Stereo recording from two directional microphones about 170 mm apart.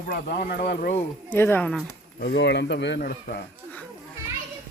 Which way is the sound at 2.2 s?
85° left.